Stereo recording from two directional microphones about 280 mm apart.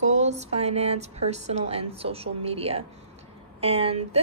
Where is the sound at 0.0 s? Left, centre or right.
Right.